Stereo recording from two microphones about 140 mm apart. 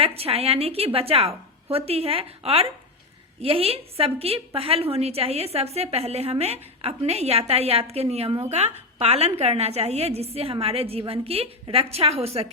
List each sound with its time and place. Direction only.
0.0 s a woman's voice: 45° right (ahead or behind)